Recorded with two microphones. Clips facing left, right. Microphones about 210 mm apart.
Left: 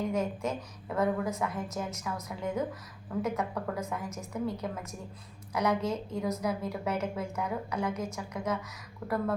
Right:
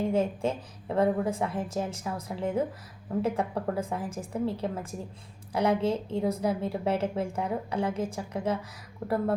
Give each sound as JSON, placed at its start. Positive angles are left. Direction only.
{"t": 0.0, "sound": "a woman's voice", "side_deg": -30}